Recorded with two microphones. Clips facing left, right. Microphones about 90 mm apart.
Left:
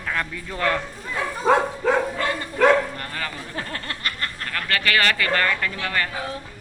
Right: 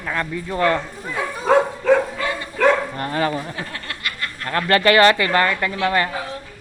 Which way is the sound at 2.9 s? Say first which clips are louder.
Right 10 dB; 30° right (ahead or behind).